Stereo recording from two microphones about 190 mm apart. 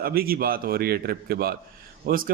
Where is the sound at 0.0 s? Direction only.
50° right (ahead or behind).